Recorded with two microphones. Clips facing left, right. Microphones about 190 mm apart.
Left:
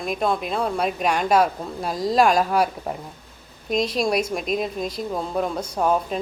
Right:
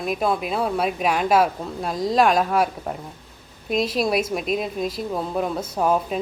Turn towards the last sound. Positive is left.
turn(degrees=-5)  # may be behind; listen again after turning